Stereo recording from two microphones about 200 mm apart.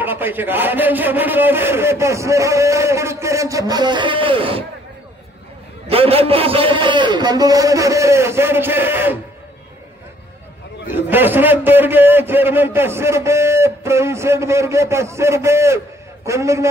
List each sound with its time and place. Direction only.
0.0 s a man's voice: 10° right (ahead or behind); by 4.6 s 25° right (ahead or behind)
5.9 s a man's voice: 30° right (ahead or behind); by 9.2 s 10° right (ahead or behind)
10.9 s a man's voice: 10° right (ahead or behind)